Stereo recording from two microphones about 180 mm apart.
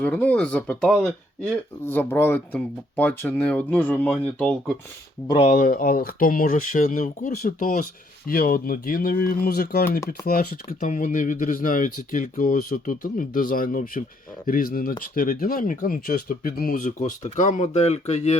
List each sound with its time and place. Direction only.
0.0 s speech: 10° left (ahead or behind)
1.9 s speech: 10° left (ahead or behind)
5.5 s speech: 50° left (ahead or behind)